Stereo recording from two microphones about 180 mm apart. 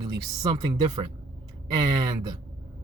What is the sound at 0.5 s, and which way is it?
Speech, 25° right (ahead or behind).